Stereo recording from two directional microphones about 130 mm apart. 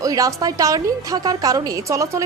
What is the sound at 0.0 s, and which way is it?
A woman's voice, 25° right (ahead or behind).